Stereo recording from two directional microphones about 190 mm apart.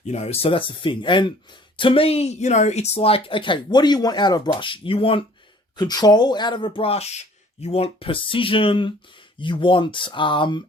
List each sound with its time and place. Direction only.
0.1 s speech: 35° left (ahead or behind)